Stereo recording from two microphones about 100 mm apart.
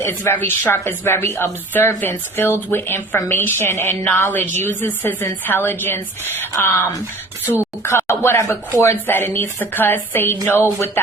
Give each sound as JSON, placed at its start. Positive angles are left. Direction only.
{"t": 0.0, "sound": "a woman's voice", "side_deg": 20}